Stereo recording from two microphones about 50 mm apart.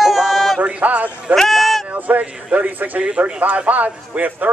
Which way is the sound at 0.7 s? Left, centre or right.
Right.